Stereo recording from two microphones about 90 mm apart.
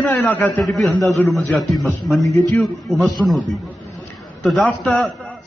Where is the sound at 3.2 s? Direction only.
Centre (ahead or behind).